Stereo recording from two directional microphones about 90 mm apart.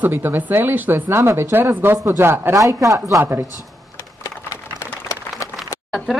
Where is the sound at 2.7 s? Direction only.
40° right (ahead or behind).